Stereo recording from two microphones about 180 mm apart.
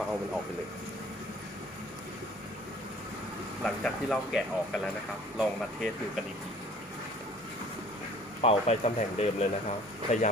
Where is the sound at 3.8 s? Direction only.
Centre (ahead or behind).